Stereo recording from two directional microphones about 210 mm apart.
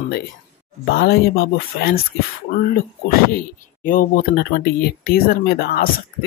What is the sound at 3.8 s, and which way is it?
Speech, 45° left (ahead or behind).